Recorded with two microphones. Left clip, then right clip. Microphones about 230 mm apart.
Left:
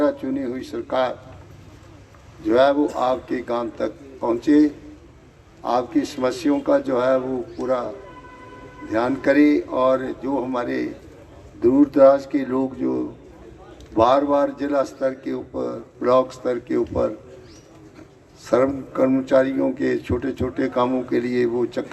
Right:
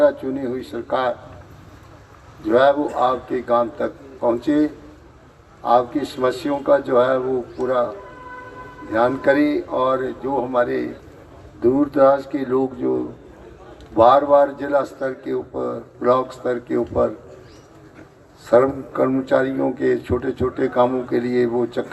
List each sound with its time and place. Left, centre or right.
0.0 s a man's voice: left
2.5 s a man's voice: left
8.9 s a man's voice: left
13.9 s a man's voice: left
18.4 s a man's voice: left